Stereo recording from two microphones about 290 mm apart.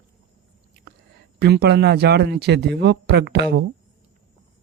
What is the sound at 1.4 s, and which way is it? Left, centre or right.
Speech, right.